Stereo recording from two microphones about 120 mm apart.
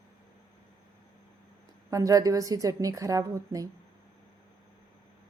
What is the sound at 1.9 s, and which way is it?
A woman's voice, 30° right (ahead or behind).